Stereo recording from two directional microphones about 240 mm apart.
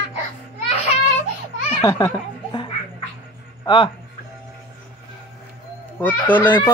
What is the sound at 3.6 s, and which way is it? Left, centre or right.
Speech, left.